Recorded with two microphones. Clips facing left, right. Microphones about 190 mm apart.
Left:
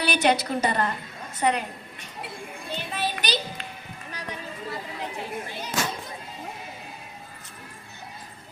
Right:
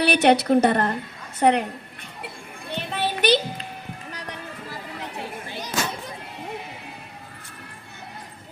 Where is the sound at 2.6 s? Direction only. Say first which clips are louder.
Right 4 dB; 65° right (ahead or behind).